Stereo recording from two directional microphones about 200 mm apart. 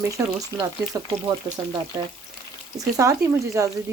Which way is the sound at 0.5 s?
20° right (ahead or behind).